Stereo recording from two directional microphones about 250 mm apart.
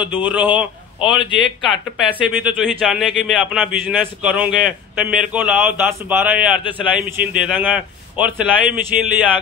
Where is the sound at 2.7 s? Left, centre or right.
Centre.